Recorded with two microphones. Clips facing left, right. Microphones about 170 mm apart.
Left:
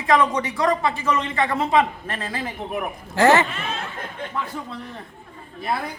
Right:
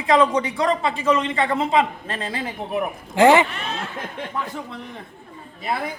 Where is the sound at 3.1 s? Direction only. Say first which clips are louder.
Right 2 dB; 15° right (ahead or behind).